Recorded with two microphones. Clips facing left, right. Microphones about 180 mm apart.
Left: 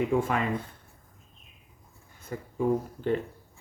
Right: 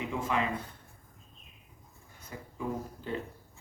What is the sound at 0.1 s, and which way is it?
Speech, 50° left (ahead or behind).